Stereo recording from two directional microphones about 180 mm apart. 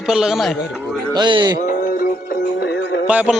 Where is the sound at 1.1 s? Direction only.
25° right (ahead or behind).